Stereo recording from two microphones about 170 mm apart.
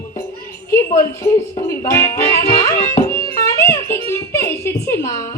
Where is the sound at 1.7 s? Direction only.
15° left (ahead or behind).